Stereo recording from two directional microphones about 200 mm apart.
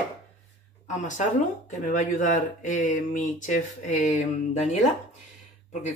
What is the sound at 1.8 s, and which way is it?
Speech, 40° left (ahead or behind).